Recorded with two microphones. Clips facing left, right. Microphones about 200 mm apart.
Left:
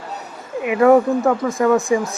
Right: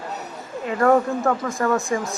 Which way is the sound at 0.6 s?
15° left (ahead or behind).